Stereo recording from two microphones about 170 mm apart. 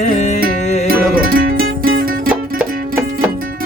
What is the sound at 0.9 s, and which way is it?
Music, 60° right (ahead or behind).